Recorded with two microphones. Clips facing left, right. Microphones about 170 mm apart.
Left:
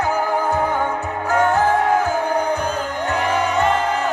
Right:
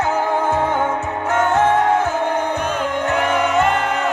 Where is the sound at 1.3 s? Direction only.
25° right (ahead or behind).